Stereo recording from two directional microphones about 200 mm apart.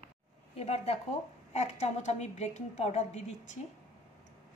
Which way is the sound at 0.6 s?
30° left (ahead or behind).